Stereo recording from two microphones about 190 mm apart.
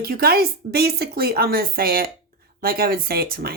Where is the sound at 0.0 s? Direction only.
55° right (ahead or behind).